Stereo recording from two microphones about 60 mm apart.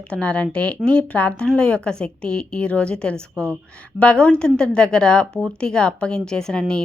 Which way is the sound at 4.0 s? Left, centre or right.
Centre.